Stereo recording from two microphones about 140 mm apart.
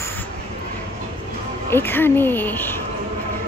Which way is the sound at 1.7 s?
15° left (ahead or behind).